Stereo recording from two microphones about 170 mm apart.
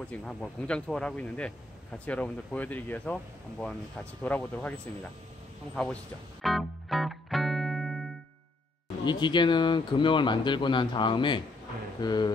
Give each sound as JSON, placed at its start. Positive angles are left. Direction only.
{"t": 0.0, "sound": "speech", "side_deg": 5}
{"t": 6.4, "sound": "music", "side_deg": 0}
{"t": 9.0, "sound": "speech", "side_deg": 25}